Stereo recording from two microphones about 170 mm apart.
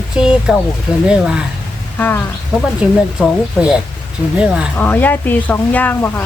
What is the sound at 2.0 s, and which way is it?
Speech, 10° left (ahead or behind).